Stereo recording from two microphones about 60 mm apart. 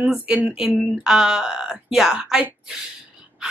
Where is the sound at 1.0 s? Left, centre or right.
Centre.